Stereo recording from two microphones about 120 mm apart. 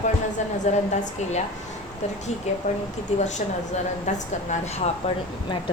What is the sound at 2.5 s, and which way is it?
Speech, 75° left (ahead or behind).